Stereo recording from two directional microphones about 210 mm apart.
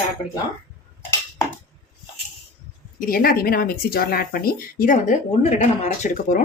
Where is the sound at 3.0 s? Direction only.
45° left (ahead or behind).